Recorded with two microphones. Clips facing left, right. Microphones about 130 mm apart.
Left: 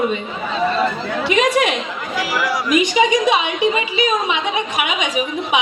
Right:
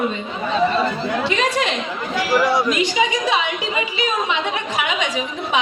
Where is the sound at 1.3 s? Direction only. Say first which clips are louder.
Left 8 dB; 15° left (ahead or behind).